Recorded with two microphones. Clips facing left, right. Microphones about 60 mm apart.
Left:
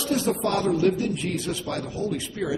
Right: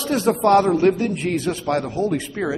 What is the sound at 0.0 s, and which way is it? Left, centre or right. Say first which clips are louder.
A man's voice: right 6 dB; right.